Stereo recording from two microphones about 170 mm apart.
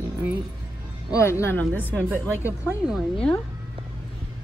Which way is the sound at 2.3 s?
10° right (ahead or behind).